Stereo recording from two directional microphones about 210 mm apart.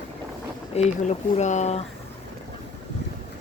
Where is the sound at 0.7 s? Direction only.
35° left (ahead or behind).